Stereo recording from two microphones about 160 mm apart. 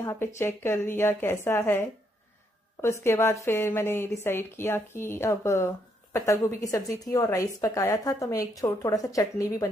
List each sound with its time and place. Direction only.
0.0 s a woman's voice: 15° left (ahead or behind)